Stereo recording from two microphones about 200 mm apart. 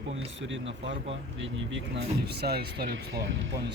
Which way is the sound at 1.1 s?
65° right (ahead or behind).